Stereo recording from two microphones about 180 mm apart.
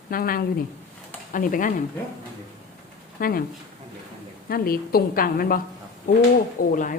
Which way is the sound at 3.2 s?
55° left (ahead or behind).